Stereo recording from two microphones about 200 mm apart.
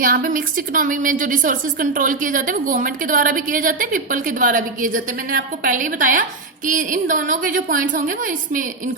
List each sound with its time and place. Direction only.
0.0 s a woman's voice: 45° right (ahead or behind)